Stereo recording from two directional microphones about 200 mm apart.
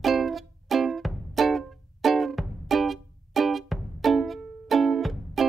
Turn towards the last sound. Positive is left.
turn(degrees=0)  # may be behind; listen again after turning